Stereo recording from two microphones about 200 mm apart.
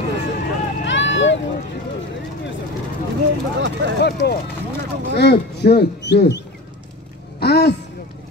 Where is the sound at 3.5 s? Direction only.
60° right (ahead or behind).